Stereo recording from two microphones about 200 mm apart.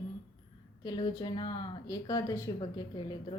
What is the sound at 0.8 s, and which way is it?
Speech, 20° left (ahead or behind).